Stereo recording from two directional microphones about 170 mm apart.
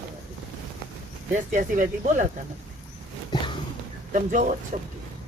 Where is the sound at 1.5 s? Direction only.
50° right (ahead or behind).